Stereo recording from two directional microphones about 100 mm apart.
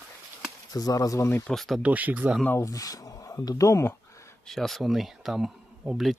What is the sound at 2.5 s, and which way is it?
Speech, 30° left (ahead or behind).